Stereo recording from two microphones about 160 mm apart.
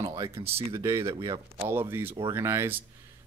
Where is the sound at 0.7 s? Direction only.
20° right (ahead or behind).